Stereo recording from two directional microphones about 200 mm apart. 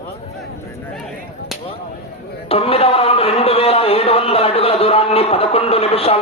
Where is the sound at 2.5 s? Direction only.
30° left (ahead or behind).